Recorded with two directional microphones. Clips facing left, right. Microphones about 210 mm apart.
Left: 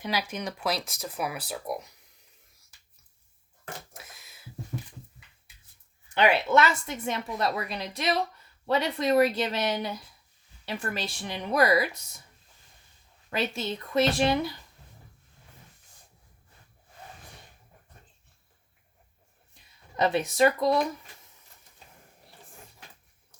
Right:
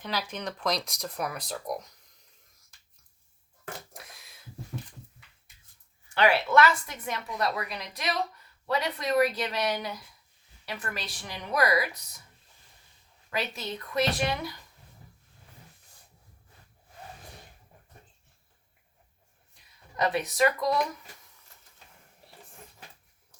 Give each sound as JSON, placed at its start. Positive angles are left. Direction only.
{"t": 0.0, "sound": "speech", "side_deg": 10}
{"t": 3.9, "sound": "a sound", "side_deg": 0}
{"t": 6.1, "sound": "a woman's voice", "side_deg": 20}
{"t": 13.3, "sound": "a woman's voice", "side_deg": 25}
{"t": 20.0, "sound": "a woman's voice", "side_deg": 25}